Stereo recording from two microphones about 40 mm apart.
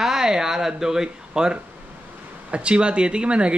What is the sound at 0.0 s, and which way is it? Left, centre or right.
Speech, centre.